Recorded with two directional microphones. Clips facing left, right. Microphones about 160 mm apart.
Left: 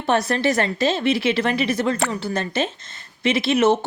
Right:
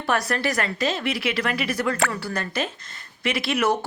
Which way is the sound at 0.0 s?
25° left (ahead or behind).